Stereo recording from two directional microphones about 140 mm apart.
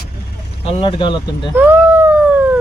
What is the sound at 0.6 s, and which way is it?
Speech, 35° left (ahead or behind).